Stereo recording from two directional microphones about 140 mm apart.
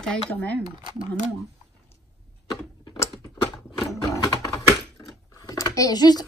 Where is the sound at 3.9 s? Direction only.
25° left (ahead or behind).